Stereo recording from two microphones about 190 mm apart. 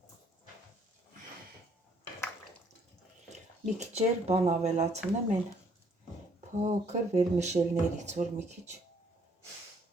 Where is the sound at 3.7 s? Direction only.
35° right (ahead or behind).